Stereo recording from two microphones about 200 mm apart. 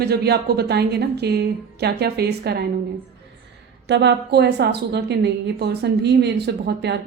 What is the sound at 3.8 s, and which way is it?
A woman's voice, 60° right (ahead or behind).